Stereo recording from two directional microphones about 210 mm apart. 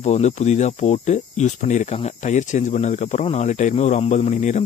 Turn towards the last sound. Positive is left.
turn(degrees=35)  # may be behind; listen again after turning